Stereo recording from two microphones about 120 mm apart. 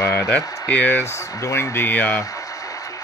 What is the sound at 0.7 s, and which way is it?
Speech, 15° left (ahead or behind).